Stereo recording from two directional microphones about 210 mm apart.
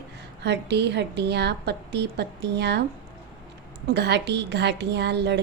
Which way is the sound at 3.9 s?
55° right (ahead or behind).